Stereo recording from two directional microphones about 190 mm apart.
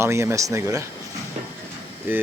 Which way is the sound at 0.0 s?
15° right (ahead or behind).